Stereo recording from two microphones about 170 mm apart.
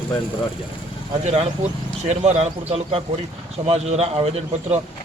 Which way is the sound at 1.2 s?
40° right (ahead or behind).